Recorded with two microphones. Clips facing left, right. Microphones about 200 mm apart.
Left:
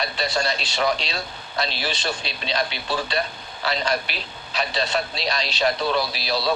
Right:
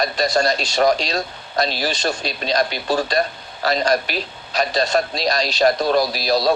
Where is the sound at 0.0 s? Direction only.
45° right (ahead or behind).